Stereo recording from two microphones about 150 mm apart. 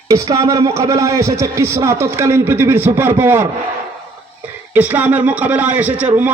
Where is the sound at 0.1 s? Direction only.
20° right (ahead or behind).